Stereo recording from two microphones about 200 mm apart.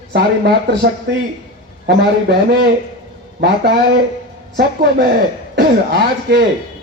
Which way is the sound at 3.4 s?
50° right (ahead or behind).